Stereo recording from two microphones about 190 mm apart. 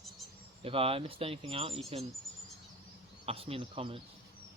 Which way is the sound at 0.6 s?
30° right (ahead or behind).